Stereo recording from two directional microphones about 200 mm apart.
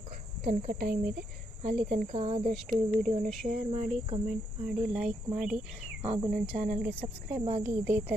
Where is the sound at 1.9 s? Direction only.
35° right (ahead or behind).